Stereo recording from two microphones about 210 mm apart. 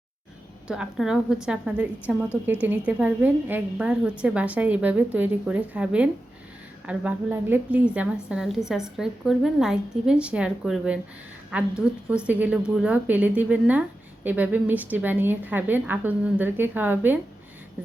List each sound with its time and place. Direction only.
0.7 s a woman's voice: 5° right (ahead or behind)